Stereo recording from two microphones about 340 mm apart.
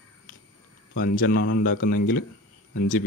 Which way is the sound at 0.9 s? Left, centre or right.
Left.